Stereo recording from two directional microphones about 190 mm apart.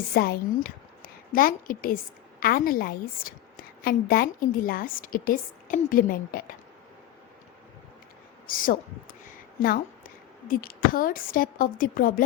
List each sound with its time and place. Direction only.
0.1 s a woman's voice: 55° left (ahead or behind)
8.4 s a woman's voice: 45° left (ahead or behind)
9.6 s a sound: 50° left (ahead or behind)
10.5 s a woman's voice: 50° left (ahead or behind)